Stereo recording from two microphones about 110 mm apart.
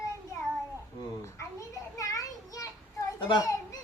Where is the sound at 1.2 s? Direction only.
30° left (ahead or behind).